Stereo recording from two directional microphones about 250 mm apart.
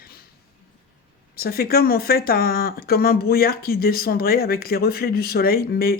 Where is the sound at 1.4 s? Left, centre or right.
Left.